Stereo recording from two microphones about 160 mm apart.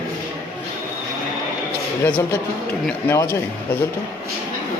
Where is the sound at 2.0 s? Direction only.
10° left (ahead or behind).